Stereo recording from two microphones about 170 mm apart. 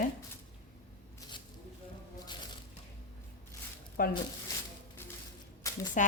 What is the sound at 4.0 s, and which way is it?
Speech, 60° left (ahead or behind).